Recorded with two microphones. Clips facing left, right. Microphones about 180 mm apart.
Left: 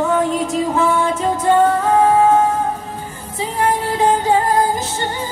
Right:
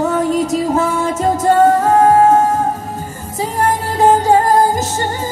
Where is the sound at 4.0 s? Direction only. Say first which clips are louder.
Right 5 dB; 45° right (ahead or behind).